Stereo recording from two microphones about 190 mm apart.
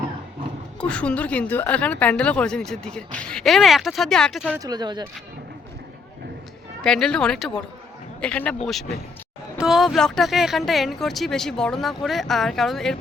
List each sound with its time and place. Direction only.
0.8 s a woman's voice: 5° left (ahead or behind)
4.5 s speech: 20° right (ahead or behind)
6.8 s a woman's voice: 5° left (ahead or behind)
9.6 s a woman's voice: centre (ahead or behind)